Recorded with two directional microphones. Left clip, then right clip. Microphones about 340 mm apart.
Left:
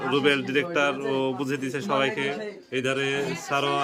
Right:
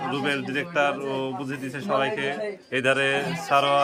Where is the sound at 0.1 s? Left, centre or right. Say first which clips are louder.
Left 8 dB; centre.